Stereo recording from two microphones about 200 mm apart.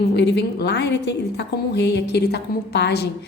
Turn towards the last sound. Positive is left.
turn(degrees=55)  # may be behind; listen again after turning